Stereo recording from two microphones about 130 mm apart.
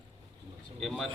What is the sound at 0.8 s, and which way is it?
Speech, centre (ahead or behind).